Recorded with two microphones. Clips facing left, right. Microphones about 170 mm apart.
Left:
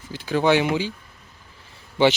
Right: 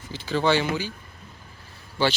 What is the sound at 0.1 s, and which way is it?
Speech, 15° left (ahead or behind).